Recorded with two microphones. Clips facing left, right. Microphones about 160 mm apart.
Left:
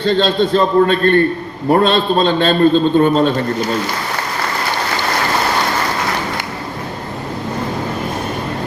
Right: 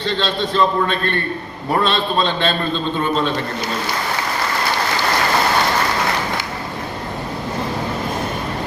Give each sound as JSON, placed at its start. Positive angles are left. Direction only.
{"t": 0.0, "sound": "a man's voice", "side_deg": 45}